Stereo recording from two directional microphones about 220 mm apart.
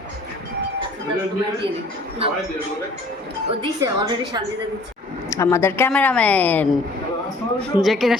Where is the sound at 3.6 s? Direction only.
20° right (ahead or behind).